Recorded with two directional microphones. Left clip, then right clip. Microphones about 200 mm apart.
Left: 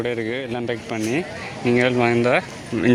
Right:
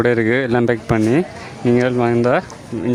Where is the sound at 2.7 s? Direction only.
5° right (ahead or behind).